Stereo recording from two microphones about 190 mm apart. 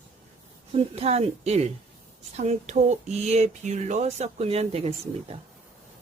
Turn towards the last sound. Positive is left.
turn(degrees=-30)  # may be behind; listen again after turning